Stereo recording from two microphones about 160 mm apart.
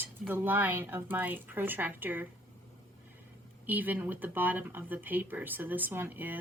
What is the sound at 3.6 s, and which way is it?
Speech, 10° right (ahead or behind).